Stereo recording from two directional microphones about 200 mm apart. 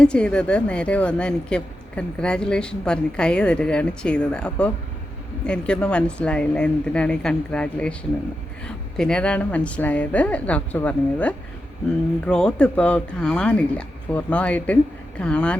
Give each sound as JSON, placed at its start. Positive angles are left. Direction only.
{"t": 0.0, "sound": "a woman's voice", "side_deg": 5}